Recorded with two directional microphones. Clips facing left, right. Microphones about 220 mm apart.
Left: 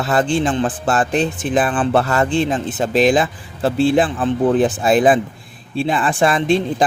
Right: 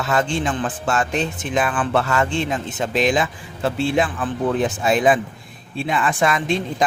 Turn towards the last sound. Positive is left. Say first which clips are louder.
# left 4 dB
turn(degrees=30)  # may be behind; listen again after turning